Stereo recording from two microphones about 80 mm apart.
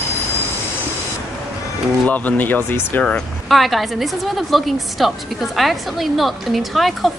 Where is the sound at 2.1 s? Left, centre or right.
Left.